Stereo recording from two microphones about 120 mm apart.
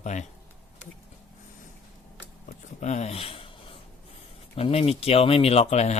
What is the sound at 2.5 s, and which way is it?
Speech, 75° left (ahead or behind).